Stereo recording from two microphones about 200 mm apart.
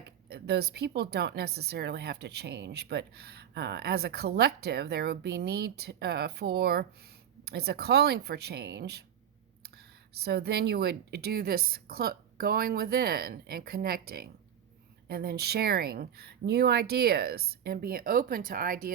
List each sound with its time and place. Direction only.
0.3 s a woman's voice: 55° right (ahead or behind)
10.2 s speech: 55° right (ahead or behind)